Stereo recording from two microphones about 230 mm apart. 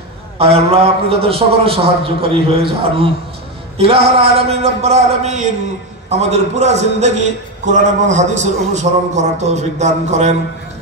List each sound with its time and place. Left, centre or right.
0.4 s a man's voice: right